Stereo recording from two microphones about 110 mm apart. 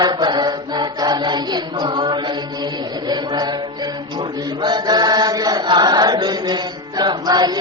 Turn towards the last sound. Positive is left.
turn(degrees=-40)  # may be behind; listen again after turning